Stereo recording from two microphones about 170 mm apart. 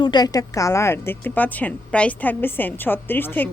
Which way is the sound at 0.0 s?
25° left (ahead or behind).